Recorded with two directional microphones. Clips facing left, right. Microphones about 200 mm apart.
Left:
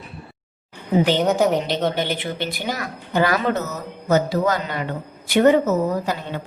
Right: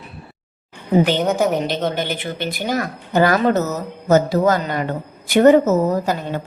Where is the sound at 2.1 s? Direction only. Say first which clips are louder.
Right 1 dB; 45° right (ahead or behind).